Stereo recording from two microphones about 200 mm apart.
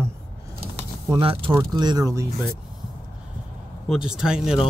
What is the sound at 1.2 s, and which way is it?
Speech, 25° right (ahead or behind).